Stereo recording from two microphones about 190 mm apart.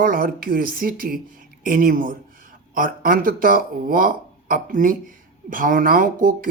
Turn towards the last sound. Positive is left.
turn(degrees=-45)  # may be behind; listen again after turning